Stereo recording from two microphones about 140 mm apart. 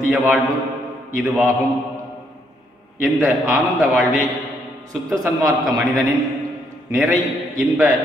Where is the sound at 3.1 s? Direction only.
20° right (ahead or behind).